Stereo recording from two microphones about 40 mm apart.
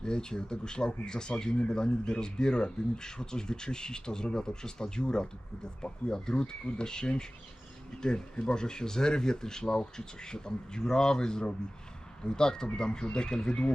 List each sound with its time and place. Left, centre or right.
0.0 s a man's voice: centre